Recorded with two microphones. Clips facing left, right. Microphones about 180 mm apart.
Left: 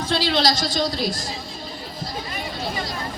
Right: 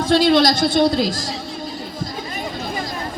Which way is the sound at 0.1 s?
50° right (ahead or behind).